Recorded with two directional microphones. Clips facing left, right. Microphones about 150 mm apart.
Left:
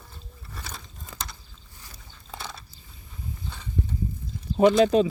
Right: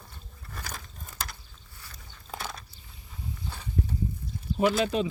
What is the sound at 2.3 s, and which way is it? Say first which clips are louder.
Biting: right 1 dB; centre (ahead or behind).